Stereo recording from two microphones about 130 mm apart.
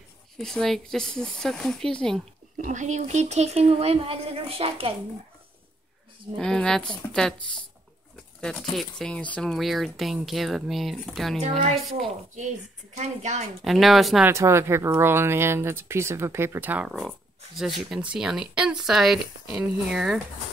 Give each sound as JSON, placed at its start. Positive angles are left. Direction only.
{"t": 0.4, "sound": "speech", "side_deg": 5}
{"t": 2.5, "sound": "speech", "side_deg": -70}
{"t": 6.3, "sound": "speech", "side_deg": 5}
{"t": 8.4, "sound": "speech", "side_deg": 5}
{"t": 12.9, "sound": "speech", "side_deg": -60}
{"t": 13.7, "sound": "speech", "side_deg": 0}
{"t": 14.2, "sound": "speech", "side_deg": -20}
{"t": 17.6, "sound": "speech", "side_deg": 0}